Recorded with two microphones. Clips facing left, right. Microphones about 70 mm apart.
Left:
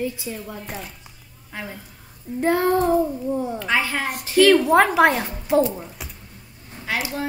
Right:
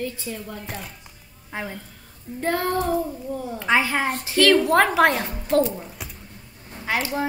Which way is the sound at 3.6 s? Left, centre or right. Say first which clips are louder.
Right 2 dB; centre.